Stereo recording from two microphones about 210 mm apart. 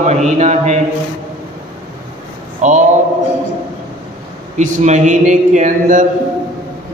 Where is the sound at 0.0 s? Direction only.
35° right (ahead or behind).